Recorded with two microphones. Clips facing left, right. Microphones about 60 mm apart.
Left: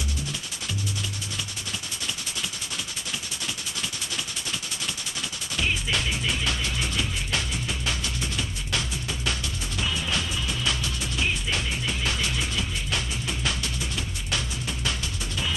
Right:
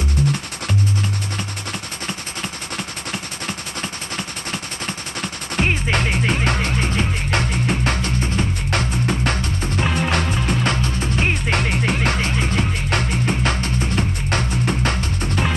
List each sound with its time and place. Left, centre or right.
0.2 s music: right
5.6 s music: right